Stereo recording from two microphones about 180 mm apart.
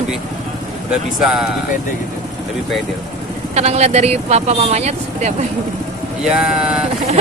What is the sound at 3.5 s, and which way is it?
Speech, 35° right (ahead or behind).